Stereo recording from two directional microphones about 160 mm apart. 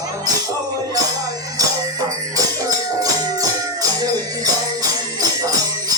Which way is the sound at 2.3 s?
20° right (ahead or behind).